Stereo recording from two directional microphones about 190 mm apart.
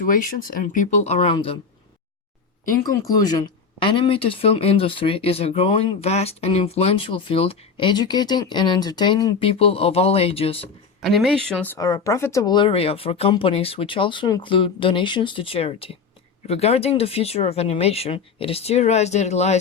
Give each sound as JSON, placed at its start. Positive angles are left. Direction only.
{"t": 0.0, "sound": "speech", "side_deg": 45}
{"t": 3.0, "sound": "speech", "side_deg": 20}
{"t": 11.0, "sound": "speech", "side_deg": 0}